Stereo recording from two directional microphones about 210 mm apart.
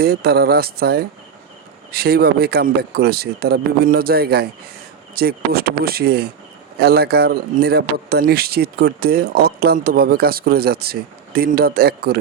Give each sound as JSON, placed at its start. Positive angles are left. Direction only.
{"t": 0.0, "sound": "a man's voice", "side_deg": -45}